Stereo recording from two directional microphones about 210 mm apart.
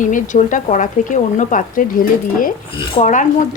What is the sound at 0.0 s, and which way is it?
A woman's voice, 35° left (ahead or behind).